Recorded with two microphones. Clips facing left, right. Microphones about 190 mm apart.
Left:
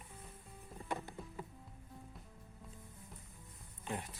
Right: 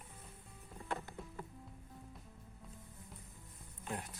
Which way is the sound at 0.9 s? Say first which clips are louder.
Even; 15° left (ahead or behind).